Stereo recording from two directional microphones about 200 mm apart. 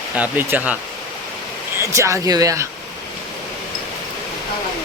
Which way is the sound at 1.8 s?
15° right (ahead or behind).